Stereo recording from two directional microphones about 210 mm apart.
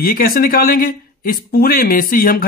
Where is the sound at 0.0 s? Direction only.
45° left (ahead or behind).